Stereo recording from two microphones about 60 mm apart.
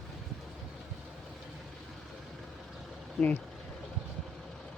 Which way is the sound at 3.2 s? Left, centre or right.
Centre.